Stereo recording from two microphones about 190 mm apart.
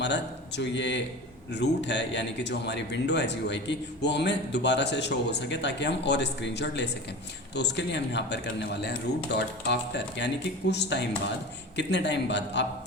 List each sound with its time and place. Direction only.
0.0 s a man's voice: 65° left (ahead or behind)